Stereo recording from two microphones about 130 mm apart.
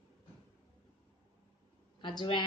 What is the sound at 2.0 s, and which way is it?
Speech, 40° left (ahead or behind).